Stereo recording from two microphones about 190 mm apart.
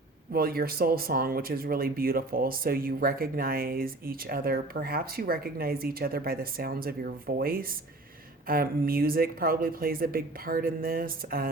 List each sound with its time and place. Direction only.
0.3 s speech: 50° right (ahead or behind)